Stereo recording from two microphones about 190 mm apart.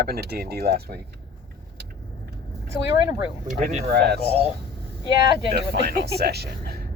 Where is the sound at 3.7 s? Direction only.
35° right (ahead or behind).